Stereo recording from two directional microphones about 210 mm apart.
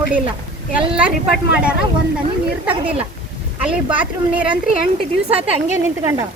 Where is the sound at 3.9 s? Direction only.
5° right (ahead or behind).